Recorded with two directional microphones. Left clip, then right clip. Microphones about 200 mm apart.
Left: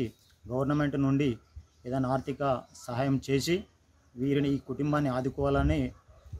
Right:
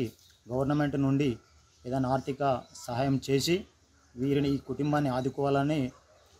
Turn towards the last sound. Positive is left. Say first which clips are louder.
# right 1 dB
turn(degrees=5)  # may be behind; listen again after turning